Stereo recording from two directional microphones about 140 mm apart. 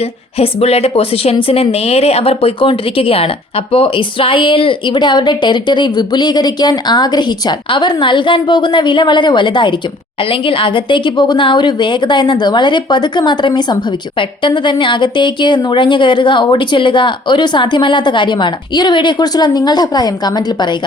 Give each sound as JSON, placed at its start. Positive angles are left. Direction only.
{"t": 0.3, "sound": "a woman's voice", "side_deg": 45}